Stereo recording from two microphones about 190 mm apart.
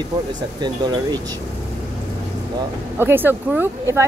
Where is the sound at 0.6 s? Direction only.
20° right (ahead or behind).